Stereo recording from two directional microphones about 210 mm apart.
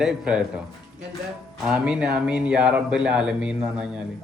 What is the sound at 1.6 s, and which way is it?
A man's voice, 5° right (ahead or behind).